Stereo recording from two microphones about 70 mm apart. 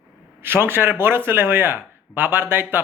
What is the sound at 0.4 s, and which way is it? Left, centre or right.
Speech, right.